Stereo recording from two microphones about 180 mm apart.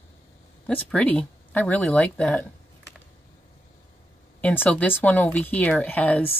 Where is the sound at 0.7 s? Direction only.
5° left (ahead or behind).